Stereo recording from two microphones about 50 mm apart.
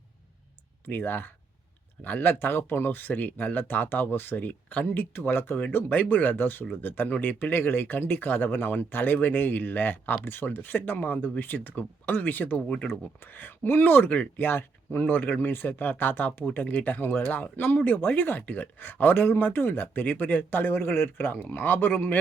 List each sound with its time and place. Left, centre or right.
0.9 s speech: left
2.4 s speech: left
5.9 s speech: left
12.6 s speech: left
12.9 s speech: left
14.8 s speech: left
17.7 s speech: left